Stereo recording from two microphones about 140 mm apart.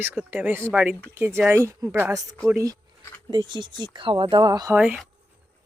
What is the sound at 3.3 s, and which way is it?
Speech, 30° right (ahead or behind).